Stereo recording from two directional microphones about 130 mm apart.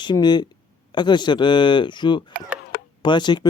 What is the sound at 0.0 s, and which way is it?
Speech, 35° left (ahead or behind).